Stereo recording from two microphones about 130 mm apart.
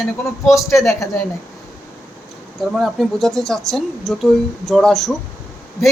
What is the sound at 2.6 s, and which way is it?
Speech, centre (ahead or behind).